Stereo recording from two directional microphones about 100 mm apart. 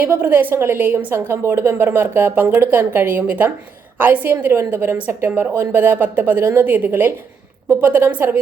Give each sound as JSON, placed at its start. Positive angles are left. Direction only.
{"t": 0.0, "sound": "a woman's voice", "side_deg": -20}